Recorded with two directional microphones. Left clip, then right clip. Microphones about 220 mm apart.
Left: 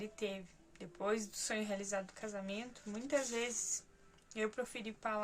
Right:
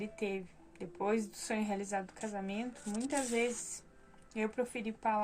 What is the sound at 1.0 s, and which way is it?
A woman's voice, 15° left (ahead or behind).